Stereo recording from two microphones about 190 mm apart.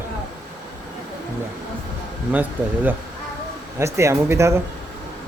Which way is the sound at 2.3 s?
10° right (ahead or behind).